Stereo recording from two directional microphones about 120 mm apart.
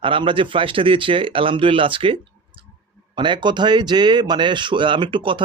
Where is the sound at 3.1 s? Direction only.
40° right (ahead or behind).